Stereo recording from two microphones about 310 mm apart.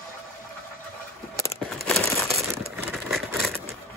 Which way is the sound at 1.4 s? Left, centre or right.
Centre.